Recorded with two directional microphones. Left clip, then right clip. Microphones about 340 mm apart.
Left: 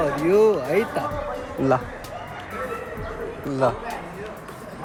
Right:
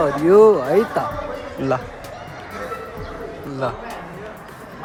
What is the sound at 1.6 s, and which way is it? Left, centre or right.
Speech, centre.